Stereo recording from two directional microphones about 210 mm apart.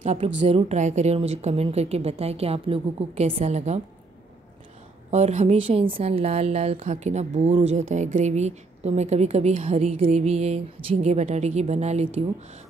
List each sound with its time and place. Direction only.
0.0 s a woman's voice: 35° right (ahead or behind)
5.1 s a woman's voice: 30° right (ahead or behind)